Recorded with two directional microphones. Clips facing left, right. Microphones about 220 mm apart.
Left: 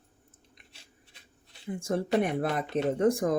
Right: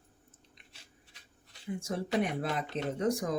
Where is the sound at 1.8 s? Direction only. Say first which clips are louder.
Left 5 dB; 50° left (ahead or behind).